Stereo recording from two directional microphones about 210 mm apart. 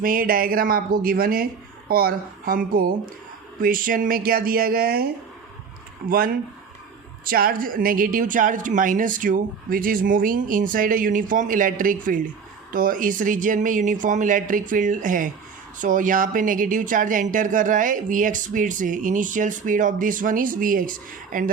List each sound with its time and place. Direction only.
0.0 s speech: 40° right (ahead or behind)
6.1 s speech: 45° right (ahead or behind)